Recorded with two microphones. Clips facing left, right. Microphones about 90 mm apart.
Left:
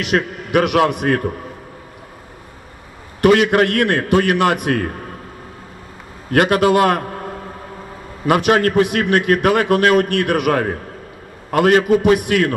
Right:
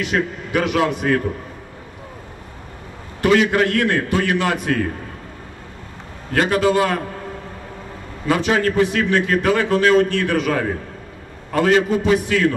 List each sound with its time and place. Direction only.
0.0 s a man's voice: 70° left (ahead or behind); by 1.3 s 55° left (ahead or behind)
3.3 s a man's voice: 60° left (ahead or behind)
6.3 s a man's voice: 60° left (ahead or behind)
8.3 s a man's voice: 60° left (ahead or behind)